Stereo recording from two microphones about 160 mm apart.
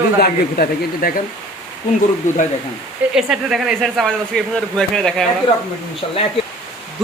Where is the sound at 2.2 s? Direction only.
50° left (ahead or behind).